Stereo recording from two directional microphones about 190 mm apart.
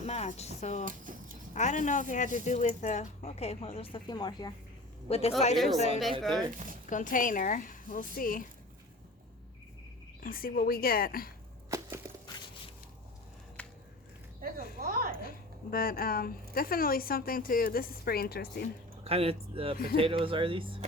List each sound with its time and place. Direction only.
0.0 s speech: 35° left (ahead or behind)
0.9 s a sound: 45° right (ahead or behind)
1.5 s speech: 40° left (ahead or behind); by 4.5 s 20° left (ahead or behind)
5.0 s speech: 30° left (ahead or behind)
5.5 s a woman's voice: centre (ahead or behind)
6.9 s a woman's voice: 45° left (ahead or behind)
10.2 s a woman's voice: 50° left (ahead or behind)
11.7 s a sound: 20° right (ahead or behind)
13.6 s a sound: 5° left (ahead or behind)
14.8 s a sound: 50° right (ahead or behind)
15.2 s a woman's voice: 50° left (ahead or behind)
19.0 s speech: 30° right (ahead or behind)
19.7 s a woman's voice: 50° left (ahead or behind)
20.0 s speech: 30° right (ahead or behind)